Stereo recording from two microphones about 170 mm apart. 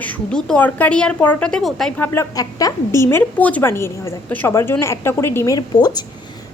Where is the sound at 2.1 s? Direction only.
20° left (ahead or behind).